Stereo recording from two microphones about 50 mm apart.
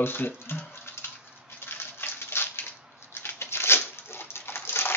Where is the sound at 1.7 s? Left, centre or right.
Left.